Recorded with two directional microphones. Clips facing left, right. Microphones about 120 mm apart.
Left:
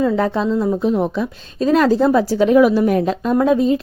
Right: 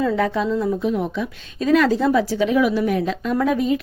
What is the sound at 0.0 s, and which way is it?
A woman's voice, 35° left (ahead or behind).